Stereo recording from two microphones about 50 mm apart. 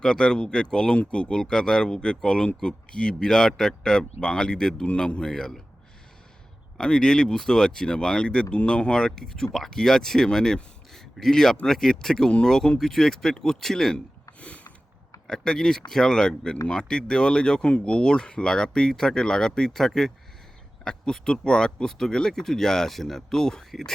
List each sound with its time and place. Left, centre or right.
0.0 s speech: centre
6.7 s speech: centre
14.3 s sniff: left
15.3 s speech: centre